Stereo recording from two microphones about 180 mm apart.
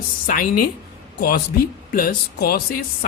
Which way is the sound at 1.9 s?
55° left (ahead or behind).